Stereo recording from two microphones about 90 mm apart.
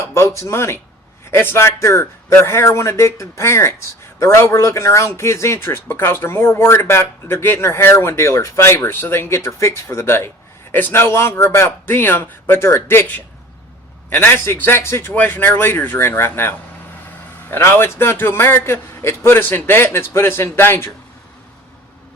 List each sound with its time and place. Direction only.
0.0 s a man's voice: 30° left (ahead or behind)